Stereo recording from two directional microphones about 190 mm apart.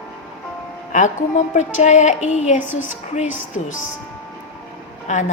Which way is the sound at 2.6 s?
10° right (ahead or behind).